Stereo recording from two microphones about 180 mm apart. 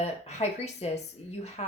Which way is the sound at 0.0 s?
40° left (ahead or behind).